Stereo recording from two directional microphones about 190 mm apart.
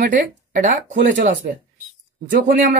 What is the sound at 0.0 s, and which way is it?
Speech, 50° right (ahead or behind).